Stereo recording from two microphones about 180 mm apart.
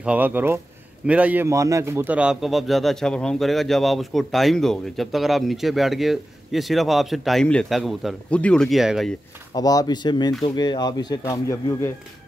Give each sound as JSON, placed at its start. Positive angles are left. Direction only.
{"t": 0.0, "sound": "a man's voice", "side_deg": -10}
{"t": 9.5, "sound": "speech", "side_deg": 20}